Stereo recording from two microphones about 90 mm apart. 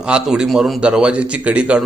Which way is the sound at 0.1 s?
5° right (ahead or behind).